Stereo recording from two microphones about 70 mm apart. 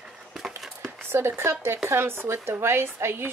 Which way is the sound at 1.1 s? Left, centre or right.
Right.